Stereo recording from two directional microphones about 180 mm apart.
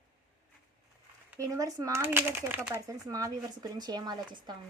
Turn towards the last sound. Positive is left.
turn(degrees=-20)  # may be behind; listen again after turning